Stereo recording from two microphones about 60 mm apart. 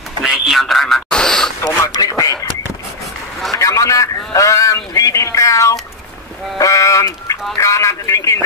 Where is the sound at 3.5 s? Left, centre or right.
Left.